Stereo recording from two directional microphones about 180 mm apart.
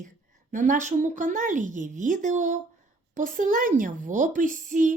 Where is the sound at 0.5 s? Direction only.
45° right (ahead or behind).